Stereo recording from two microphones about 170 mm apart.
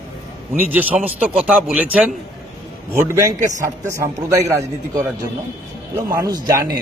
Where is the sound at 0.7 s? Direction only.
10° right (ahead or behind).